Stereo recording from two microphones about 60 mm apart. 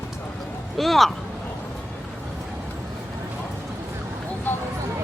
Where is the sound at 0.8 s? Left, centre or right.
Centre.